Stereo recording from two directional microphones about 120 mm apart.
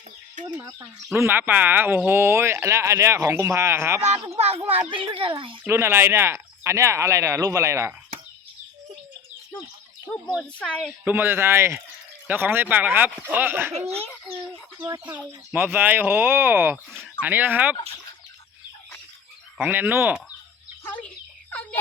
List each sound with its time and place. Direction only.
0.6 s speech: 25° right (ahead or behind)
4.4 s a child's voice: 55° right (ahead or behind)
4.8 s a child's voice: 40° right (ahead or behind)
5.6 s speech: 20° right (ahead or behind)
10.1 s speech: 10° left (ahead or behind)
11.0 s speech: 20° right (ahead or behind)
14.8 s speech: 35° right (ahead or behind)
15.3 s speech: 15° right (ahead or behind)
19.5 s speech: 10° right (ahead or behind)
20.8 s speech: 15° left (ahead or behind)
21.5 s a sound: 15° left (ahead or behind)